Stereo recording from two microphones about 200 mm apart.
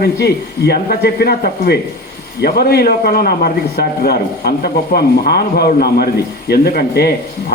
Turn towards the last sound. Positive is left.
turn(degrees=50)  # may be behind; listen again after turning